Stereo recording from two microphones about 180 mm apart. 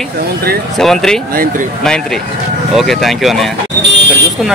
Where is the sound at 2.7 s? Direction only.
Centre (ahead or behind).